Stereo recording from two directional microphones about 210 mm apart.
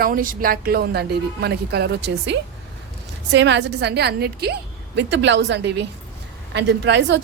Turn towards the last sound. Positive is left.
turn(degrees=-55)  # may be behind; listen again after turning